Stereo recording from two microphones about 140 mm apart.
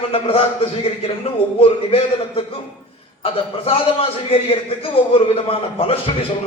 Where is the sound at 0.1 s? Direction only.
45° left (ahead or behind).